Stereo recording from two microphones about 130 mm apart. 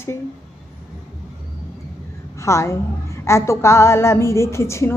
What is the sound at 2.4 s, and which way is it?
A woman's voice, 20° left (ahead or behind).